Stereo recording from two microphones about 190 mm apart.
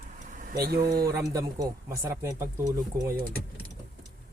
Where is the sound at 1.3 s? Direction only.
15° right (ahead or behind).